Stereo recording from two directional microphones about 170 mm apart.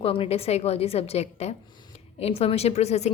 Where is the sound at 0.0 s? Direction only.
35° left (ahead or behind).